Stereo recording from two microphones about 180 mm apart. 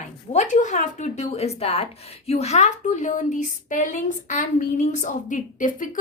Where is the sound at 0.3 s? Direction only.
40° left (ahead or behind).